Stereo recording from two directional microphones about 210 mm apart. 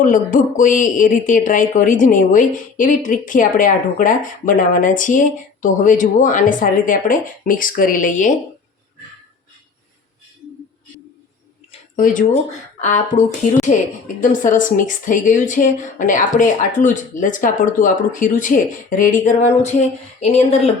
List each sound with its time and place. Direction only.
0.0 s speech: 40° left (ahead or behind)
11.9 s speech: 40° left (ahead or behind)